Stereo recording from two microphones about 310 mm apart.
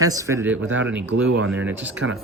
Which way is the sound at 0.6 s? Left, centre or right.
Right.